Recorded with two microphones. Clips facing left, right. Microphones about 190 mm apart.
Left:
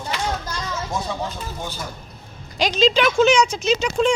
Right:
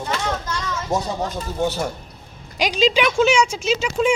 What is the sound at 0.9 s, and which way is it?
Speech, 40° right (ahead or behind).